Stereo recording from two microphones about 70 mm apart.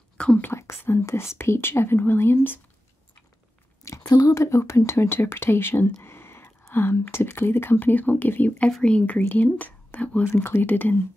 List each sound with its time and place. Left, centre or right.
0.4 s speech: left
3.8 s a sound: left
4.3 s speech: left
6.0 s a sound: left
6.7 s speech: left
10.3 s speech: left